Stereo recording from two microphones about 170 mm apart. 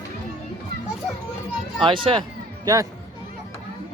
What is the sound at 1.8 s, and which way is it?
Speech, 30° right (ahead or behind).